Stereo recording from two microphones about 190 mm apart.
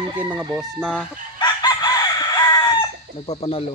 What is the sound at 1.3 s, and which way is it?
Chicken, 20° left (ahead or behind).